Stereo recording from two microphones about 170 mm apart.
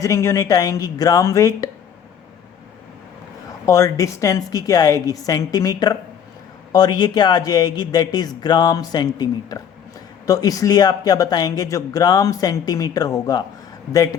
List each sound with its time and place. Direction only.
0.0 s speech: 15° left (ahead or behind)
3.7 s speech: 20° left (ahead or behind)